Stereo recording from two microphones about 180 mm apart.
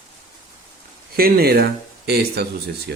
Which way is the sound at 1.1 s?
60° right (ahead or behind).